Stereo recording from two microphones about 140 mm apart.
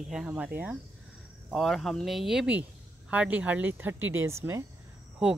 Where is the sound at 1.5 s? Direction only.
Centre (ahead or behind); by 4.7 s 20° right (ahead or behind).